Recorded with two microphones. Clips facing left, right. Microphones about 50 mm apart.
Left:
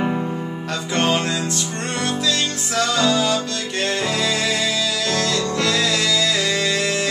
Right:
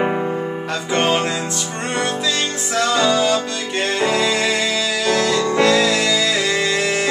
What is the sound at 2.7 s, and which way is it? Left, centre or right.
Music, centre.